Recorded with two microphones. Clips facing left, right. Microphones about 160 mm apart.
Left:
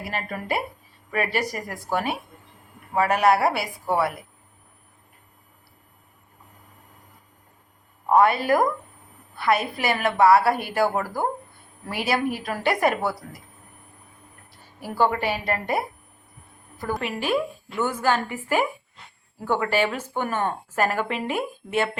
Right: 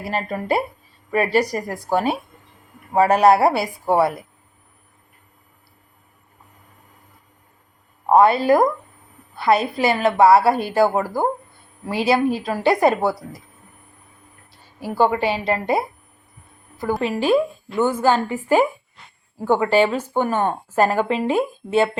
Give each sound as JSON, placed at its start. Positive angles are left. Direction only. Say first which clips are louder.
{"t": 0.1, "sound": "a woman's voice", "louder": "right 7 dB", "side_deg": -35}
{"t": 8.1, "sound": "a woman's voice", "louder": "right 4 dB", "side_deg": -30}
{"t": 14.8, "sound": "a woman's voice", "louder": "right 4 dB", "side_deg": -20}
{"t": 17.0, "sound": "a woman's voice", "louder": "right 7 dB", "side_deg": -30}